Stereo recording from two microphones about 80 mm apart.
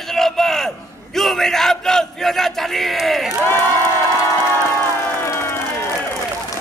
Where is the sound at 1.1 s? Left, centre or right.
Centre.